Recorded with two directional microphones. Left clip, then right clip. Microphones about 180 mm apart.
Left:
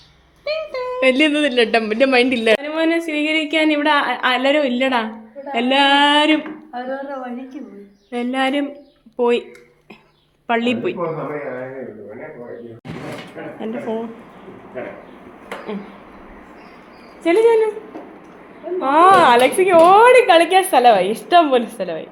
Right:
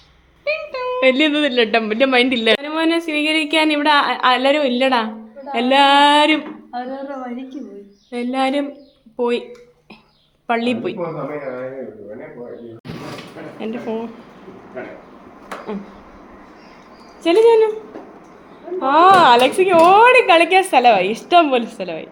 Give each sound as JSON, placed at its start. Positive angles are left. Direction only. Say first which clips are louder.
{"t": 0.4, "sound": "a sound", "louder": "right 1 dB", "side_deg": -30}
{"t": 0.9, "sound": "a man's voice", "louder": "even", "side_deg": 0}
{"t": 5.5, "sound": "a sound", "louder": "right 2 dB", "side_deg": -10}
{"t": 8.1, "sound": "a man's voice", "louder": "even", "side_deg": 5}
{"t": 10.4, "sound": "a man's voice", "louder": "left 1 dB", "side_deg": 0}
{"t": 13.6, "sound": "a man's voice", "louder": "even", "side_deg": 0}
{"t": 17.2, "sound": "a man's voice", "louder": "right 2 dB", "side_deg": -5}
{"t": 18.8, "sound": "a man's voice", "louder": "right 1 dB", "side_deg": 0}